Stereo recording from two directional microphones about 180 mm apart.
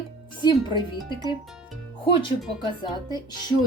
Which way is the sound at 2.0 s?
30° left (ahead or behind).